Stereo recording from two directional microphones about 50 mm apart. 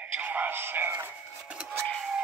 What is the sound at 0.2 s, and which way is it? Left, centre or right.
Speech, right.